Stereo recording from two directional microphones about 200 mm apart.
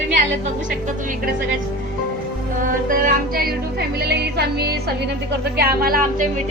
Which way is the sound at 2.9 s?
45° right (ahead or behind).